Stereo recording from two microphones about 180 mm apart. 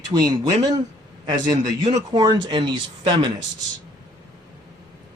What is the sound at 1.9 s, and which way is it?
Speech, 25° right (ahead or behind).